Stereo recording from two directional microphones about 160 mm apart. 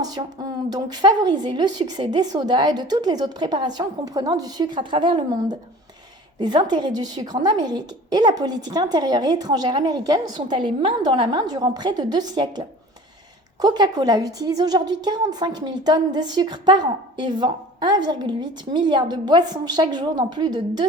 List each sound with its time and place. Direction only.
0.0 s a woman's voice: 25° right (ahead or behind)